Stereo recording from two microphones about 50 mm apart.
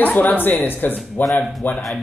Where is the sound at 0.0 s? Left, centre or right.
Left.